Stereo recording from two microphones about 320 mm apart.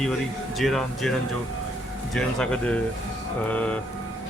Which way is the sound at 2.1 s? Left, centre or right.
Centre.